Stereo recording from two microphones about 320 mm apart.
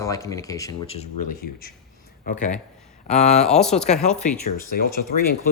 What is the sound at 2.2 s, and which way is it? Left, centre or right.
Speech, left.